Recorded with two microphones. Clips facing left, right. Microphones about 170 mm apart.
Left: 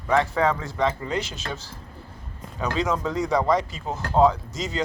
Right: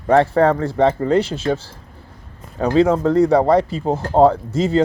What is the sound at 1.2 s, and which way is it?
Speech, 30° right (ahead or behind).